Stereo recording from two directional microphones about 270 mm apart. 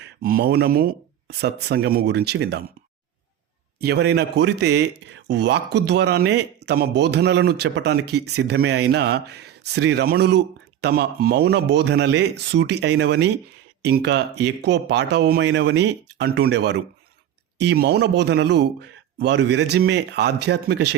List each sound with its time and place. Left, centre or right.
0.0 s speech: right
3.8 s speech: right